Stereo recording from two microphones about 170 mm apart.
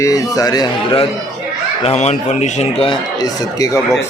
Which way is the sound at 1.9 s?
40° left (ahead or behind).